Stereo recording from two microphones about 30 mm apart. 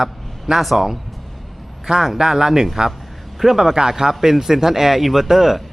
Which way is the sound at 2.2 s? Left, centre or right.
Centre.